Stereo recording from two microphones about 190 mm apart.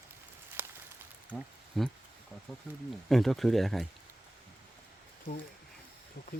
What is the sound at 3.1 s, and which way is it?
Speech, centre (ahead or behind).